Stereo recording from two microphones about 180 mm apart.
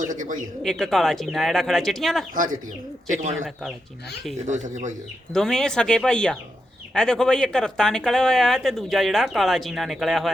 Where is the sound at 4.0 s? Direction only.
65° left (ahead or behind).